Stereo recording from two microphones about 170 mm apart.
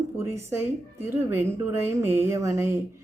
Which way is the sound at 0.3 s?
15° right (ahead or behind).